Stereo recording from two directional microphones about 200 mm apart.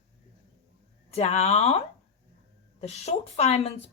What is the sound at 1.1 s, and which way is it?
Speech, 30° left (ahead or behind).